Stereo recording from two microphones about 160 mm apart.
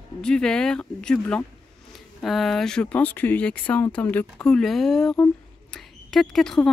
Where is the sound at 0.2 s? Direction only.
5° left (ahead or behind).